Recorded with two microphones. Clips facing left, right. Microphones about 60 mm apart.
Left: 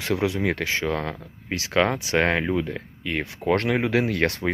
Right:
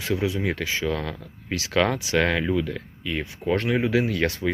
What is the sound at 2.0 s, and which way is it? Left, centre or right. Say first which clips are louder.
Speech: left 1 dB; left.